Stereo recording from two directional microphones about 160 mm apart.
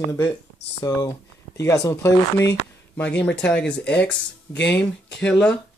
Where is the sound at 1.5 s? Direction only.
20° left (ahead or behind).